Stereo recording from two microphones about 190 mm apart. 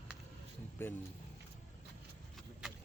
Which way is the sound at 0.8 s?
10° left (ahead or behind).